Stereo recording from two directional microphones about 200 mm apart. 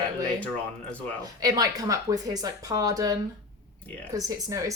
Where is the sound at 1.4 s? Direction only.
20° right (ahead or behind).